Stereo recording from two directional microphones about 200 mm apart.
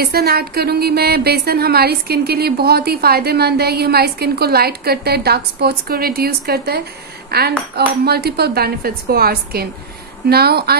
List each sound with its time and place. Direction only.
0.0 s a woman's voice: 50° right (ahead or behind)